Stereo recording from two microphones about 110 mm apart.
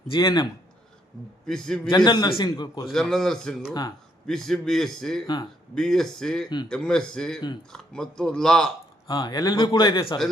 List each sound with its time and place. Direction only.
0.1 s a man's voice: 45° left (ahead or behind)
1.5 s speech: 5° left (ahead or behind)
1.9 s a man's voice: 40° left (ahead or behind)
2.8 s speech: centre (ahead or behind)
5.2 s a man's voice: 35° left (ahead or behind)
5.7 s speech: 5° left (ahead or behind)
9.0 s a man's voice: 40° left (ahead or behind)